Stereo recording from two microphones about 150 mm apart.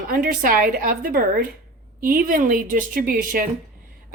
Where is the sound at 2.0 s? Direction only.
65° right (ahead or behind).